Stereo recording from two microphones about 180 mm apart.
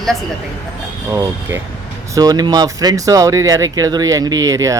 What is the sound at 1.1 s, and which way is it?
Speech, 15° right (ahead or behind).